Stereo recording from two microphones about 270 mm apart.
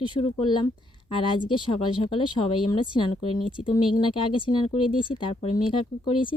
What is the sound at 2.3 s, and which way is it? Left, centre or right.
Speech, centre.